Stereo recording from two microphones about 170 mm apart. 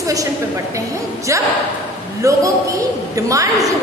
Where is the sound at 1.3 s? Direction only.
20° right (ahead or behind).